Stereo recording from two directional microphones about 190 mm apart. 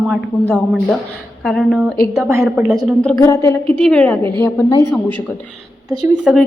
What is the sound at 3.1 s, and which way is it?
A woman's voice, 15° left (ahead or behind).